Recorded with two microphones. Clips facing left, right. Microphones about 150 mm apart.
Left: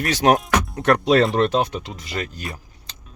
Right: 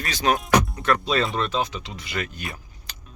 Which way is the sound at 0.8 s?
70° left (ahead or behind).